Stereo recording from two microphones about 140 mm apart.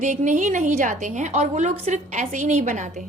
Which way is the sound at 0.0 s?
65° right (ahead or behind).